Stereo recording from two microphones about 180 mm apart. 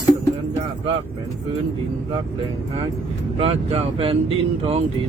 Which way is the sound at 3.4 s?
35° right (ahead or behind).